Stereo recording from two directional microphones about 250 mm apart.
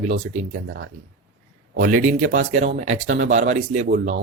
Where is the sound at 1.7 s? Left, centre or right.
Right.